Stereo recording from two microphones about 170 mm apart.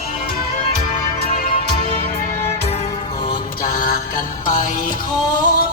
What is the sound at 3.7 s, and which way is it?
Mantra, 55° left (ahead or behind).